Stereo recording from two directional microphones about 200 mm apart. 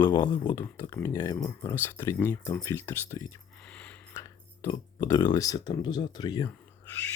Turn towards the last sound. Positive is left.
turn(degrees=15)  # may be behind; listen again after turning